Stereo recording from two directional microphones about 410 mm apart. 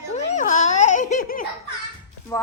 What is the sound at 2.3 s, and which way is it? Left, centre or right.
Speech, centre.